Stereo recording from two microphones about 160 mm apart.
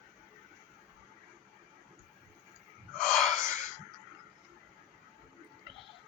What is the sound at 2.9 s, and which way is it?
Wheeze, 5° left (ahead or behind).